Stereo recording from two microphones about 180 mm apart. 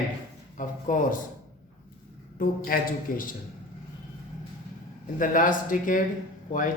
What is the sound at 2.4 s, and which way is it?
Speech, 50° left (ahead or behind).